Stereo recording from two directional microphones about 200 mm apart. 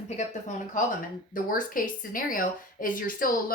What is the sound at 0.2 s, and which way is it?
A woman's voice, 40° left (ahead or behind).